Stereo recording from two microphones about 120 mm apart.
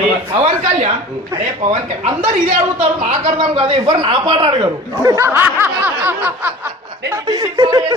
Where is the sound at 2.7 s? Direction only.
60° right (ahead or behind).